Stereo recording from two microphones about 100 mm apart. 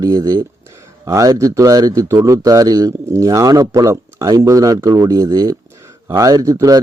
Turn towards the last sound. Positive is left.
turn(degrees=-35)  # may be behind; listen again after turning